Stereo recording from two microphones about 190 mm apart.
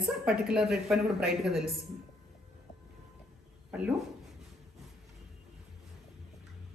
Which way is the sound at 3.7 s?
5° right (ahead or behind).